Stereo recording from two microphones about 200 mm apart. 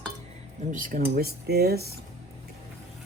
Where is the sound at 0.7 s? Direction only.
40° right (ahead or behind).